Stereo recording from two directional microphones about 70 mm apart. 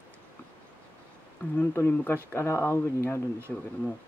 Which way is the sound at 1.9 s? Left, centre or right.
Left.